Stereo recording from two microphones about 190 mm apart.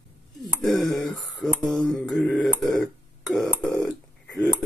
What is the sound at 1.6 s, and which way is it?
Mantra, 5° left (ahead or behind).